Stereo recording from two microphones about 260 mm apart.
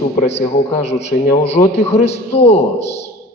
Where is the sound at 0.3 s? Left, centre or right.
Left.